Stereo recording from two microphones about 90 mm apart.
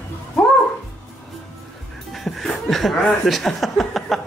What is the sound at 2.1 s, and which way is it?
Speech, centre (ahead or behind).